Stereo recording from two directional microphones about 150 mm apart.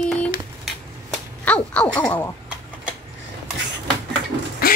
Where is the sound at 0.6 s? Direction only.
5° left (ahead or behind).